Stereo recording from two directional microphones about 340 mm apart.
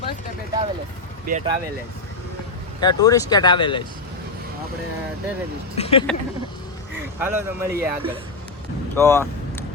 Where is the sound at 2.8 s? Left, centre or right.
Centre.